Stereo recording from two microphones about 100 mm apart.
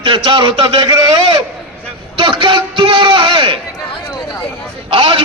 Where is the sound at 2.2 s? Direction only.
55° right (ahead or behind).